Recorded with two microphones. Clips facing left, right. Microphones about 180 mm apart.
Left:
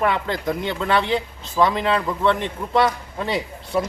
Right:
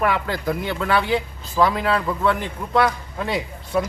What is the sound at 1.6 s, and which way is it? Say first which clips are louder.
Speech: left 1 dB; 25° left (ahead or behind).